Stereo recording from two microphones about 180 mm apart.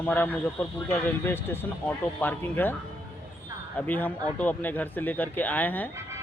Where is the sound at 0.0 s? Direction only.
10° left (ahead or behind).